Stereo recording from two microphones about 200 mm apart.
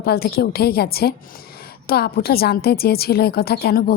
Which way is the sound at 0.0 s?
50° left (ahead or behind).